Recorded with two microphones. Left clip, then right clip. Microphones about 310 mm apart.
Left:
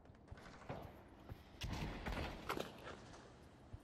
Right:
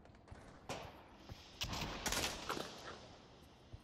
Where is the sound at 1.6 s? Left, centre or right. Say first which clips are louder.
Right 6 dB; centre.